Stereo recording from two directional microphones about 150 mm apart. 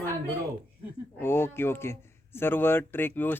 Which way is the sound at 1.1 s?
15° left (ahead or behind).